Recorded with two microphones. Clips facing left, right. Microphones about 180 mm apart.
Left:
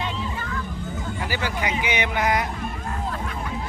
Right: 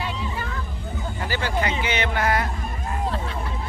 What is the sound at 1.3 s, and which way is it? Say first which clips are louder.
Speech: right 3 dB; 10° left (ahead or behind).